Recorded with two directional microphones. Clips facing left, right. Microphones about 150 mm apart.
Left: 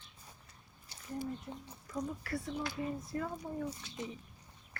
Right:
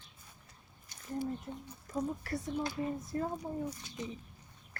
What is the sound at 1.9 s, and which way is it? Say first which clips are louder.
Speech: right 3 dB; 30° right (ahead or behind).